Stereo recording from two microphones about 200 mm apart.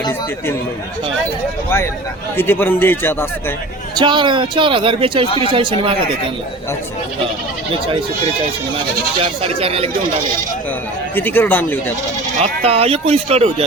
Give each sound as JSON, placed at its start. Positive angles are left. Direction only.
{"t": 2.3, "sound": "a man's voice", "side_deg": 10}
{"t": 3.9, "sound": "speech", "side_deg": -25}
{"t": 9.4, "sound": "speech", "side_deg": -30}
{"t": 11.1, "sound": "a man's voice", "side_deg": 10}
{"t": 12.4, "sound": "speech", "side_deg": -30}